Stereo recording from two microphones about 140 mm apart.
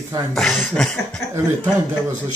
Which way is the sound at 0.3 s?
Centre (ahead or behind).